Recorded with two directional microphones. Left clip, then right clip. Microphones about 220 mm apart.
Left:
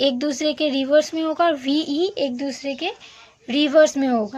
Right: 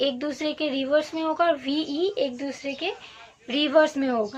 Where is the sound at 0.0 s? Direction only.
45° left (ahead or behind).